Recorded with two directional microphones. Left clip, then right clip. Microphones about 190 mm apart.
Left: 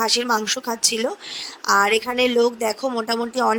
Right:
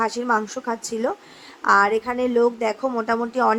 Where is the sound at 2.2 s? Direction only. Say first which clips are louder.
Left 2 dB; 45° left (ahead or behind).